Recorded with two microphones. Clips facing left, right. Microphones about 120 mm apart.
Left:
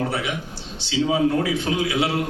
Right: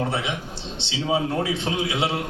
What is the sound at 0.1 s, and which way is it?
A man's voice, 25° right (ahead or behind).